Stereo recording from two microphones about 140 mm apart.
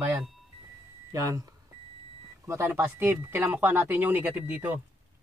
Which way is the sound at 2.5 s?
20° right (ahead or behind).